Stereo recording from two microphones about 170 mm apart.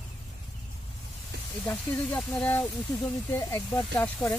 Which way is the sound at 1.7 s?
10° left (ahead or behind).